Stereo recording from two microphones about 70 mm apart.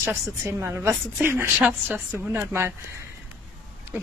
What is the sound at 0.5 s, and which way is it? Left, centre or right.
Speech, right.